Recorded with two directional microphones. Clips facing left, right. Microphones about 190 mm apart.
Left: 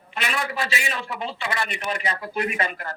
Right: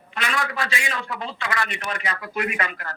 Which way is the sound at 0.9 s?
30° left (ahead or behind).